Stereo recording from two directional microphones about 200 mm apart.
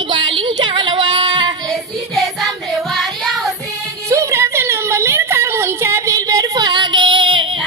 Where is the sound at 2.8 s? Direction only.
Centre (ahead or behind).